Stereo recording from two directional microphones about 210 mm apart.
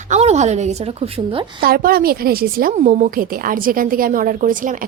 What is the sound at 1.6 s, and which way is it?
A woman's voice, 45° right (ahead or behind).